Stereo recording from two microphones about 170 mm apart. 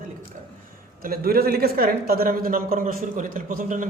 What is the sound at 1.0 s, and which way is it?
Speech, 60° right (ahead or behind).